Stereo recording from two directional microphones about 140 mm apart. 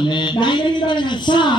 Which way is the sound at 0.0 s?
35° left (ahead or behind).